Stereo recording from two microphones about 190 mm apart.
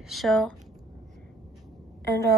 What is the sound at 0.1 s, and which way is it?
Speech, centre (ahead or behind).